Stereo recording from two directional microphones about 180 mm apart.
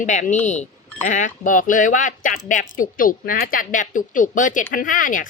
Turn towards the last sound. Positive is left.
turn(degrees=50)  # may be behind; listen again after turning